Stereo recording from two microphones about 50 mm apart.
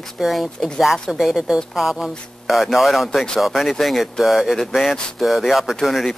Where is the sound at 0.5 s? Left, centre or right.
Centre.